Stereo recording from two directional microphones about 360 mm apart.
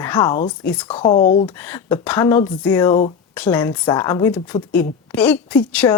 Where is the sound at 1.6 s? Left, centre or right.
Centre.